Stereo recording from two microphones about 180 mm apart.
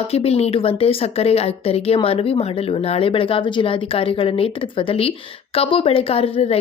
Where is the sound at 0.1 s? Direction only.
35° left (ahead or behind).